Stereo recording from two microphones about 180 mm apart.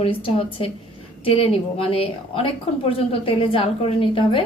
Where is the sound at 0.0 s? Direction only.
30° left (ahead or behind).